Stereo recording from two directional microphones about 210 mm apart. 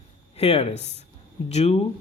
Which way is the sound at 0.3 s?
30° left (ahead or behind).